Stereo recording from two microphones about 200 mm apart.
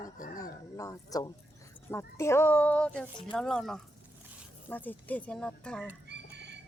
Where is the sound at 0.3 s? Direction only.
15° left (ahead or behind).